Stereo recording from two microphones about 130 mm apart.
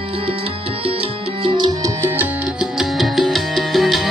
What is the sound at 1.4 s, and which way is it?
Music, 35° right (ahead or behind).